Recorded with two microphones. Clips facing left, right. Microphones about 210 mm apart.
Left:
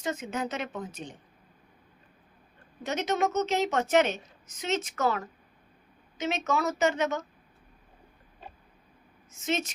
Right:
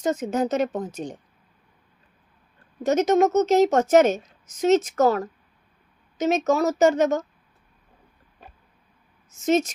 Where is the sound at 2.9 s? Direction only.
45° right (ahead or behind).